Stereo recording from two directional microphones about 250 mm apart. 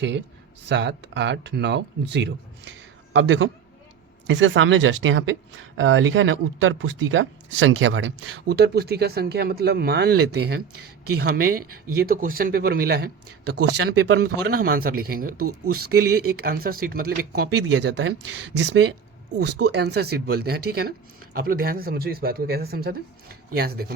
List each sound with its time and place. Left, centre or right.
0.6 s speech: right